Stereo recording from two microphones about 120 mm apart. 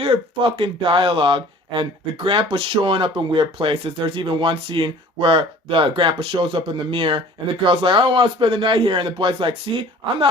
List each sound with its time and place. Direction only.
0.0 s speech: 50° right (ahead or behind)